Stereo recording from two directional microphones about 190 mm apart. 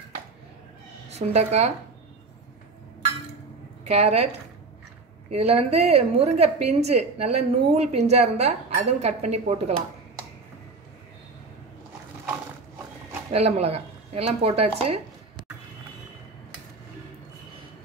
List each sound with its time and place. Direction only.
1.0 s a woman's voice: 35° right (ahead or behind)
3.8 s a woman's voice: 35° right (ahead or behind)
5.3 s a woman's voice: 30° right (ahead or behind)
13.3 s a woman's voice: 35° right (ahead or behind)